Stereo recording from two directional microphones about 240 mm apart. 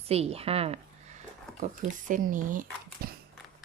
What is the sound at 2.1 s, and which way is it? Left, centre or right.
Speech, right.